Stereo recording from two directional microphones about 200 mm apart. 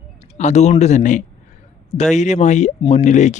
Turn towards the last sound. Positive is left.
turn(degrees=35)  # may be behind; listen again after turning